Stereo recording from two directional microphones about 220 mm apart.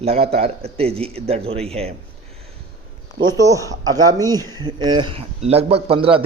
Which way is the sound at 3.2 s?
15° right (ahead or behind).